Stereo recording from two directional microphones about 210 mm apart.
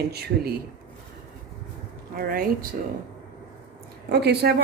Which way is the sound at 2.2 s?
45° right (ahead or behind).